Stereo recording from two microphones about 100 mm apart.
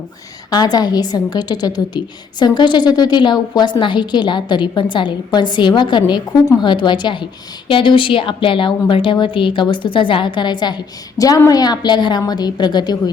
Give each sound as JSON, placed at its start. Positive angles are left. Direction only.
{"t": 0.5, "sound": "a woman's voice", "side_deg": 45}
{"t": 11.2, "sound": "a woman's voice", "side_deg": 35}